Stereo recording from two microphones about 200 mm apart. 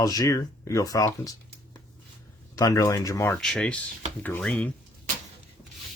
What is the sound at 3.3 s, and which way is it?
Speech, 5° left (ahead or behind).